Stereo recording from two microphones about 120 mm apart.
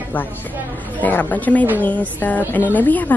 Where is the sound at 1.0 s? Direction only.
15° left (ahead or behind).